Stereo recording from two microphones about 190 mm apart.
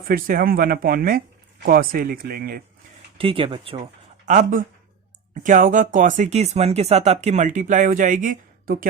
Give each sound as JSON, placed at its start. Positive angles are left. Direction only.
{"t": 0.0, "sound": "speech", "side_deg": -50}
{"t": 3.2, "sound": "speech", "side_deg": -30}
{"t": 4.3, "sound": "speech", "side_deg": -40}